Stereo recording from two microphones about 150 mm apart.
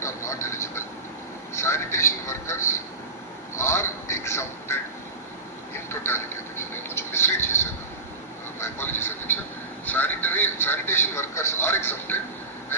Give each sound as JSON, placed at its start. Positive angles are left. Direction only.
{"t": 0.0, "sound": "vehicle", "side_deg": 20}
{"t": 1.5, "sound": "speech", "side_deg": 15}
{"t": 5.9, "sound": "a sound", "side_deg": 15}
{"t": 8.5, "sound": "speech", "side_deg": 15}